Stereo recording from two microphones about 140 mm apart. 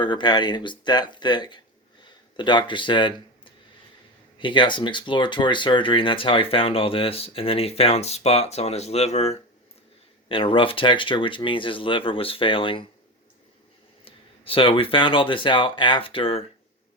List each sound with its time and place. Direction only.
0.0 s speech: 35° left (ahead or behind); by 9.4 s 50° left (ahead or behind)
10.2 s speech: 40° left (ahead or behind)
14.0 s speech: 40° left (ahead or behind)